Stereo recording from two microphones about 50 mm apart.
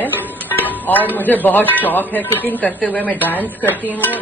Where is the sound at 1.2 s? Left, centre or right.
Left.